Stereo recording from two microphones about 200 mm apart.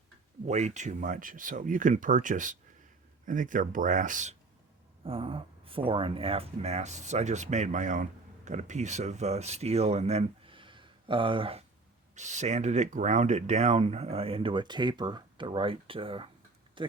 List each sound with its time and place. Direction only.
0.4 s speech: 35° right (ahead or behind)
5.0 s speech: 25° right (ahead or behind)
12.1 s speech: 35° right (ahead or behind)
16.8 s a sound: 25° right (ahead or behind)